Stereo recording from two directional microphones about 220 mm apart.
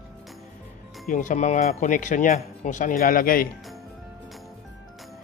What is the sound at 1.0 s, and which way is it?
Speech, 35° left (ahead or behind).